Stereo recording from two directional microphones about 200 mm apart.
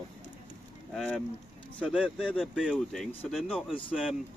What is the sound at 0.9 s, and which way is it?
Speech, 5° left (ahead or behind).